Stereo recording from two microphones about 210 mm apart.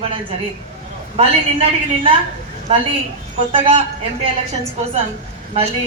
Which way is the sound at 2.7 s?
30° right (ahead or behind).